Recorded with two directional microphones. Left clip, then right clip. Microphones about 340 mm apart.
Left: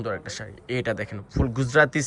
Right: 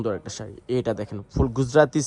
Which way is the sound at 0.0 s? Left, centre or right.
Right.